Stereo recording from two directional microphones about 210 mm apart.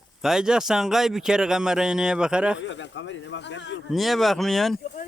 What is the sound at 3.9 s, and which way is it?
Speech, centre (ahead or behind).